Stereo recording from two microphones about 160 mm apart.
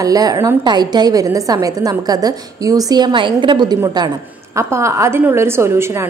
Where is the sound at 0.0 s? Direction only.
20° right (ahead or behind).